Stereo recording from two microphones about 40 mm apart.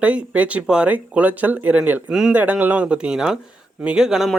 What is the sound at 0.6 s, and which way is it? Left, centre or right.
Speech, right.